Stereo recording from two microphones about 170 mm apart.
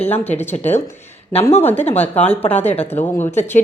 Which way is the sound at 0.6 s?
10° left (ahead or behind).